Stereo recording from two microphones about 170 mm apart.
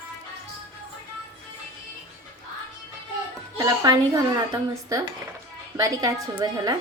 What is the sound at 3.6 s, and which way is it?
A woman's voice, 20° right (ahead or behind).